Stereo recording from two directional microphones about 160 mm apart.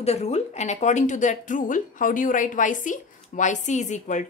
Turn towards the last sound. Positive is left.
turn(degrees=50)  # may be behind; listen again after turning